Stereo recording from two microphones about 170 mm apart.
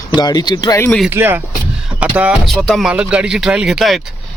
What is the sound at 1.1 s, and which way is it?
Speech, 10° right (ahead or behind).